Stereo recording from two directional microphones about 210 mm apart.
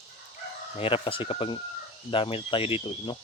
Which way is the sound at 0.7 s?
25° left (ahead or behind).